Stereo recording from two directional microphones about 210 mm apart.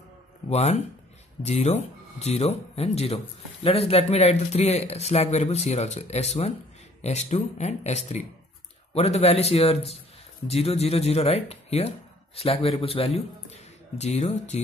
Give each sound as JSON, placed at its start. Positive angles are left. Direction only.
{"t": 0.5, "sound": "a man's voice", "side_deg": 30}